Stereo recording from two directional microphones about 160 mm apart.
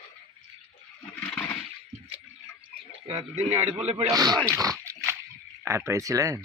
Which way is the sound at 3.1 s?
15° right (ahead or behind).